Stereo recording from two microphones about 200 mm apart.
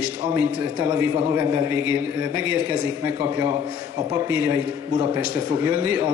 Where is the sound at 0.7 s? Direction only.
10° right (ahead or behind).